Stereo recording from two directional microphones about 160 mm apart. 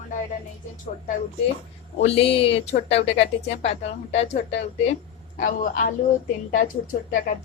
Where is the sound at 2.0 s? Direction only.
40° left (ahead or behind).